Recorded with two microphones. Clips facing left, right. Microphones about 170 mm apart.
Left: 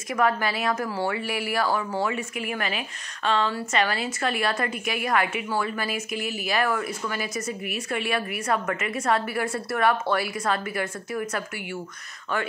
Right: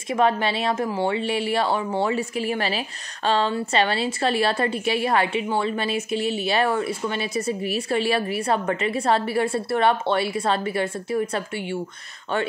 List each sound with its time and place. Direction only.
0.1 s speech: 25° right (ahead or behind)